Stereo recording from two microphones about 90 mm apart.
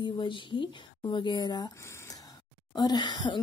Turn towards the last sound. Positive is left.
turn(degrees=55)  # may be behind; listen again after turning